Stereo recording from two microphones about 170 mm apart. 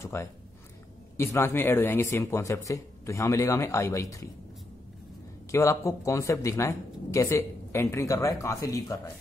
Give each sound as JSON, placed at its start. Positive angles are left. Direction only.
{"t": 0.0, "sound": "speech", "side_deg": 15}
{"t": 5.5, "sound": "speech", "side_deg": 15}